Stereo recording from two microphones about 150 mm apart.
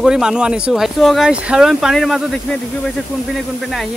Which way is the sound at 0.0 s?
5° right (ahead or behind).